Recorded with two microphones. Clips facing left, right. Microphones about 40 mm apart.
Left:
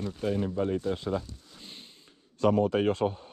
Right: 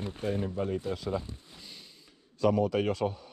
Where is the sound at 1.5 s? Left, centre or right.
Left.